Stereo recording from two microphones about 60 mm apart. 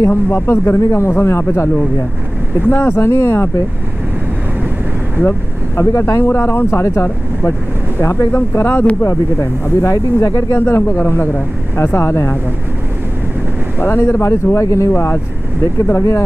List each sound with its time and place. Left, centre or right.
0.3 s speech: left
2.7 s speech: left
3.0 s speech: left
5.8 s speech: left
8.4 s speech: left
9.0 s speech: left
10.6 s speech: left
13.7 s speech: left